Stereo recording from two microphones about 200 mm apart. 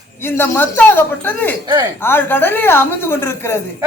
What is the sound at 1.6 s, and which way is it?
Speech, 20° right (ahead or behind).